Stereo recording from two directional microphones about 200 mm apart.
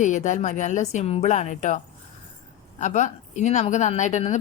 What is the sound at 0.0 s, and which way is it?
Speech, 35° left (ahead or behind).